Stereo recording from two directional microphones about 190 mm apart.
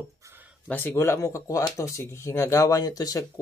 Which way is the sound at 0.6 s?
10° left (ahead or behind).